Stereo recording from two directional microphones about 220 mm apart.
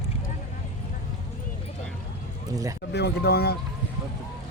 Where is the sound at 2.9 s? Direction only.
50° left (ahead or behind).